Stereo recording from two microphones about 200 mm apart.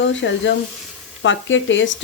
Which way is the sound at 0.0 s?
65° left (ahead or behind).